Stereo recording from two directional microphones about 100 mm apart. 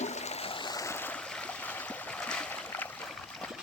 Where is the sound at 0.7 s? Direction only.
35° left (ahead or behind).